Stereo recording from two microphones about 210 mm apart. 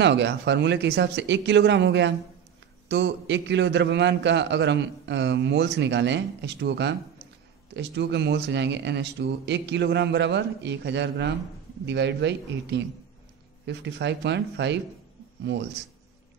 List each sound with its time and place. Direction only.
0.0 s a man's voice: 55° right (ahead or behind)